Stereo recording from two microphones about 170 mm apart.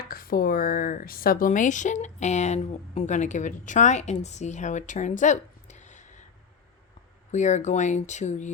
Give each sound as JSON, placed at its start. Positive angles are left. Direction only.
{"t": 0.1, "sound": "speech", "side_deg": 60}
{"t": 7.3, "sound": "speech", "side_deg": 45}